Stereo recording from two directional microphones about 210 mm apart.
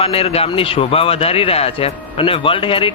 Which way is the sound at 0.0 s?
30° left (ahead or behind).